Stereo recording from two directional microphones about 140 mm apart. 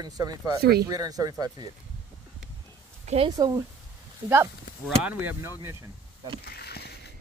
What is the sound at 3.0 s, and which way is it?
Speech, 50° right (ahead or behind).